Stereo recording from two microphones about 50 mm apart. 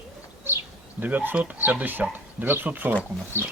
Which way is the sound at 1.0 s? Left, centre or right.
Right.